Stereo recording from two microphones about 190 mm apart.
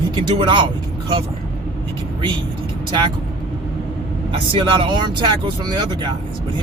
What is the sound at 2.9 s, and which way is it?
Speech, 25° right (ahead or behind).